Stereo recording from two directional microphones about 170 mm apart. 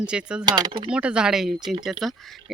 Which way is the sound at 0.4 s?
25° right (ahead or behind).